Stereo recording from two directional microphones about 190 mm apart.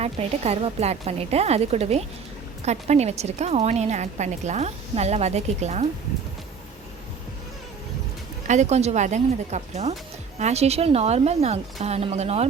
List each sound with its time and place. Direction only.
0.0 s a woman's voice: 35° right (ahead or behind)
8.4 s a woman's voice: 35° right (ahead or behind)